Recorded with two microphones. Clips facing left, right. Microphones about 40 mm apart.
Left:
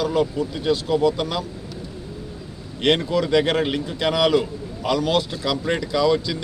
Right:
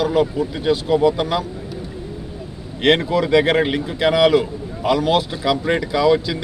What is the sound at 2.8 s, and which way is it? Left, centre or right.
Speech, centre.